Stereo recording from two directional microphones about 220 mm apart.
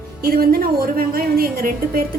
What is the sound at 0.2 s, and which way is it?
A woman's voice, 45° right (ahead or behind).